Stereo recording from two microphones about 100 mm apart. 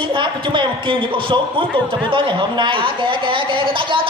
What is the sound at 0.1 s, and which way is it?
A woman's voice, 55° right (ahead or behind).